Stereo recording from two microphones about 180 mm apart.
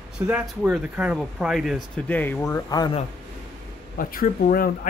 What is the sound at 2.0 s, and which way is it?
Speech, 10° left (ahead or behind).